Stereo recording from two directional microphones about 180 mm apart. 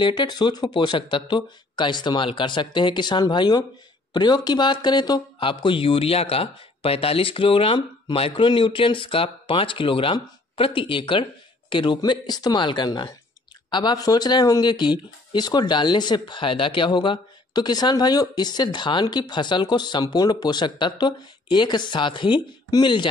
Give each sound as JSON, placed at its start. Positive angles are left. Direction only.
{"t": 0.0, "sound": "speech", "side_deg": 25}